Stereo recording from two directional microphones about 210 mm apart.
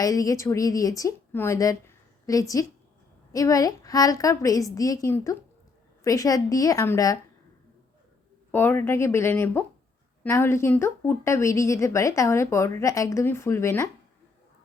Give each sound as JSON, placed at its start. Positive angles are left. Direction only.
{"t": 0.0, "sound": "a woman's voice", "side_deg": 15}
{"t": 8.5, "sound": "a woman's voice", "side_deg": 10}